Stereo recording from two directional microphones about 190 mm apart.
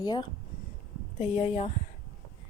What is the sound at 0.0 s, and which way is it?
Speech, 20° left (ahead or behind).